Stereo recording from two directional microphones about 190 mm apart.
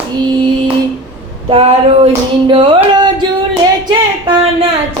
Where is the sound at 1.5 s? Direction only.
30° right (ahead or behind).